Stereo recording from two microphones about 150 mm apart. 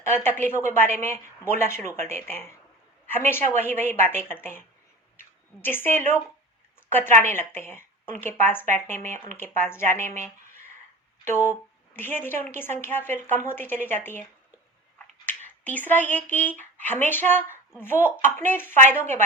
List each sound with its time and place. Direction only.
0.0 s a woman's voice: 15° left (ahead or behind)
5.6 s a woman's voice: 15° left (ahead or behind)
11.3 s a woman's voice: 15° left (ahead or behind)
14.9 s a sound: 10° left (ahead or behind)
16.3 s a woman's voice: 10° left (ahead or behind)